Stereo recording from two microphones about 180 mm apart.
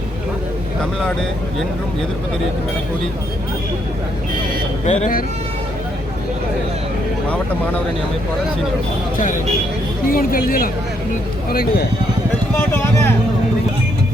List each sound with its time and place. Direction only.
4.9 s speech: 45° left (ahead or behind)
7.3 s speech: 5° left (ahead or behind)
9.1 s speech: 45° left (ahead or behind)
12.5 s speech: 15° left (ahead or behind)